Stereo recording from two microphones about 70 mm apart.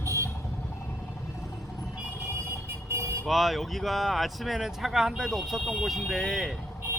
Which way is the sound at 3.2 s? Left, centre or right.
Centre.